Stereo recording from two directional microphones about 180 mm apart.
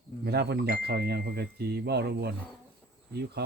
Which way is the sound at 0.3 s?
65° right (ahead or behind).